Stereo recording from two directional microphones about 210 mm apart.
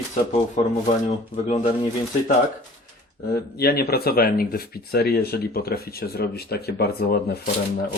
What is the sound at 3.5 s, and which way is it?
Speech, 50° left (ahead or behind).